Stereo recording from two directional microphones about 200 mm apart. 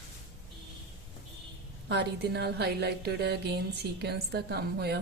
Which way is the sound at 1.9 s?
55° right (ahead or behind).